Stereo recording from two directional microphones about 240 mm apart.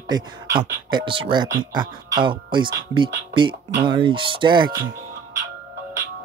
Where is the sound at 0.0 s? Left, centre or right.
Centre.